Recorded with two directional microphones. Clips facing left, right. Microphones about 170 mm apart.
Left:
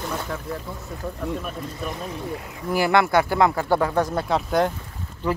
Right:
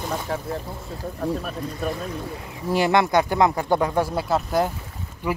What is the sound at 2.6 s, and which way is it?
Speech, 20° right (ahead or behind).